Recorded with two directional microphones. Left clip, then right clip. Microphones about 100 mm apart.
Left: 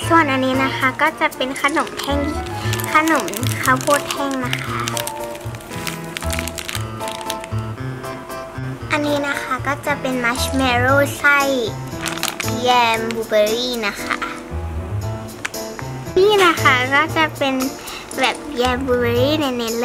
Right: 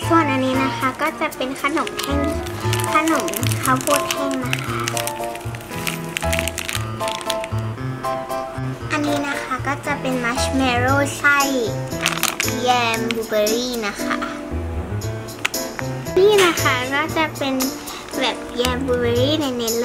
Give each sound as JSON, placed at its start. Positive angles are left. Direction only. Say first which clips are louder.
{"t": 0.1, "sound": "speech", "louder": "left 2 dB", "side_deg": 40}
{"t": 3.1, "sound": "speech", "louder": "left 1 dB", "side_deg": 10}
{"t": 4.3, "sound": "music", "louder": "left 1 dB", "side_deg": 5}
{"t": 8.9, "sound": "a woman's voice", "louder": "left 2 dB", "side_deg": 30}
{"t": 12.0, "sound": "music", "louder": "right 2 dB", "side_deg": -5}
{"t": 12.6, "sound": "a child's voice", "louder": "left 4 dB", "side_deg": 30}
{"t": 16.2, "sound": "speech", "louder": "left 1 dB", "side_deg": 35}